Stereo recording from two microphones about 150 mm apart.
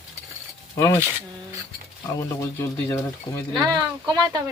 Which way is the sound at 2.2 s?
20° left (ahead or behind).